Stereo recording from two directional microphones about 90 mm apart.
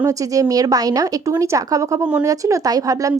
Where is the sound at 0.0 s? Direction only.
40° right (ahead or behind).